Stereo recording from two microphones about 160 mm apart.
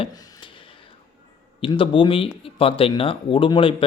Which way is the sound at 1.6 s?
35° left (ahead or behind).